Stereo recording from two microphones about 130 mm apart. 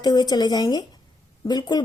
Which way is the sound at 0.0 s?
30° left (ahead or behind).